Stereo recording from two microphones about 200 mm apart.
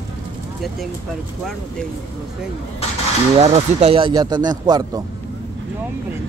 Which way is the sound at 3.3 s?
30° right (ahead or behind).